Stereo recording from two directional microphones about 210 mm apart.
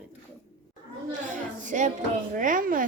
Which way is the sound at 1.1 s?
35° right (ahead or behind).